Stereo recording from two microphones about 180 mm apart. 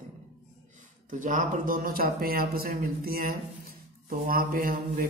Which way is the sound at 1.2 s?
45° right (ahead or behind).